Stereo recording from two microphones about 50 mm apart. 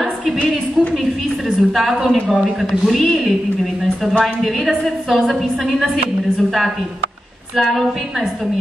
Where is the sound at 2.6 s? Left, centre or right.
Centre.